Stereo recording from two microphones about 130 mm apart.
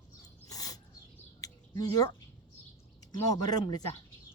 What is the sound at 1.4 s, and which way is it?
Bird, 30° left (ahead or behind).